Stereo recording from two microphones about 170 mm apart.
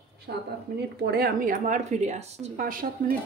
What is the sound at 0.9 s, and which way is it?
Speech, 70° right (ahead or behind).